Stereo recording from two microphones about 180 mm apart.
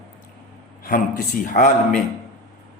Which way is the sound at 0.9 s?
50° left (ahead or behind).